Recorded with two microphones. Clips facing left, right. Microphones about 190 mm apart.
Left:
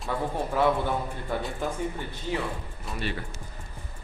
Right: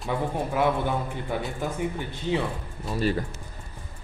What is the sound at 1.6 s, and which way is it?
Speech, 15° right (ahead or behind).